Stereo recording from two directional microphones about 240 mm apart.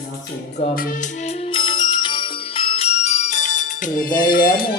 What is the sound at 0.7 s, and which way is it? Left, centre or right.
Music, left.